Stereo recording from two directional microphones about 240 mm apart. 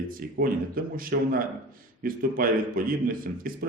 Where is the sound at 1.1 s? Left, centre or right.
Right.